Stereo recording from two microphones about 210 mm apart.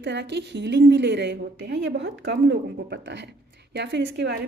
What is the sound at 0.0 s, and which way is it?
A woman's voice, 55° right (ahead or behind).